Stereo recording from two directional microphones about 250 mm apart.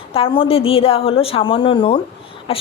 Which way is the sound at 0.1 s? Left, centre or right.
Left.